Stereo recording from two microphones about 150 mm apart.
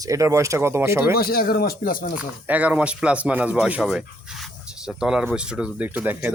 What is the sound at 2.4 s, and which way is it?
Speech, 10° right (ahead or behind).